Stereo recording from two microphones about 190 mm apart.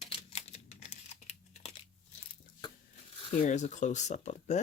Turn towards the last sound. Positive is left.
turn(degrees=40)  # may be behind; listen again after turning